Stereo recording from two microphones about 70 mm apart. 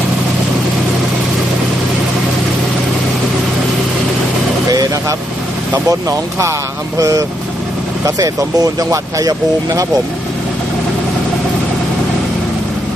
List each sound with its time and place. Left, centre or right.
4.7 s vehicle: right
5.7 s speech: right